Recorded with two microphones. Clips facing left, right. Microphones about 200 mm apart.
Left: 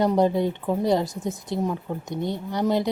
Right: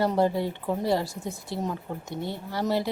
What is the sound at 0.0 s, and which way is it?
Speech, 20° left (ahead or behind).